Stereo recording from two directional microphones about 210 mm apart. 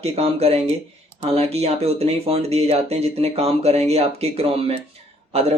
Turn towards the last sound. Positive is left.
turn(degrees=-30)  # may be behind; listen again after turning